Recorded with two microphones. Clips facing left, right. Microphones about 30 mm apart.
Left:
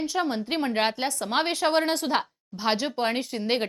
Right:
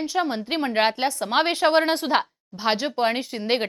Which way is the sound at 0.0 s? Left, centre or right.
Centre.